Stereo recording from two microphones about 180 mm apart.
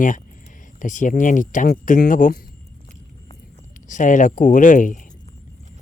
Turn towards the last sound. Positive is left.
turn(degrees=45)  # may be behind; listen again after turning